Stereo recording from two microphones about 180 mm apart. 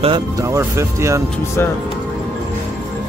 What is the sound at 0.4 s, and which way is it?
Speech, 15° right (ahead or behind).